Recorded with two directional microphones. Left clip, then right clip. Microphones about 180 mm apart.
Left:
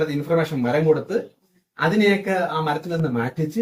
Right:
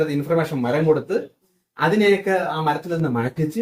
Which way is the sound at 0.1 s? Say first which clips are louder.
Even; 20° right (ahead or behind).